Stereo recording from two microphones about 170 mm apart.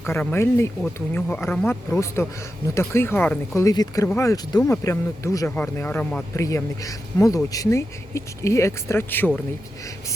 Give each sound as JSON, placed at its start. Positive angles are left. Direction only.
{"t": 0.0, "sound": "speech", "side_deg": 10}
{"t": 6.3, "sound": "speech", "side_deg": 20}